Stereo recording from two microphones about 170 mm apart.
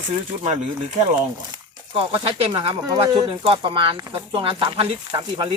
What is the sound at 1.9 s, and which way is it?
Speech, 30° right (ahead or behind).